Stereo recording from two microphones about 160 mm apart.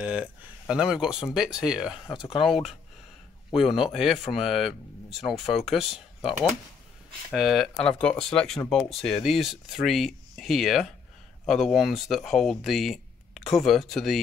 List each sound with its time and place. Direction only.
0.0 s speech: 5° right (ahead or behind)
2.1 s speech: 30° left (ahead or behind)
2.4 s speech: centre (ahead or behind)